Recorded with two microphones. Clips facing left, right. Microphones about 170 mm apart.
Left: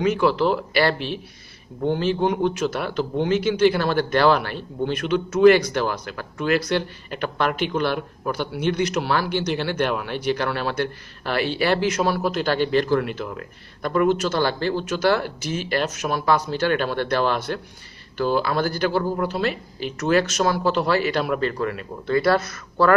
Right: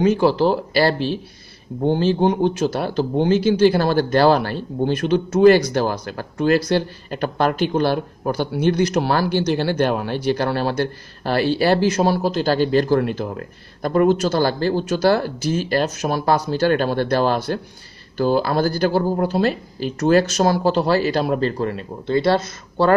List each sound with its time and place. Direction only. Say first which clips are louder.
0.0 s a man's voice: right 3 dB; 35° right (ahead or behind)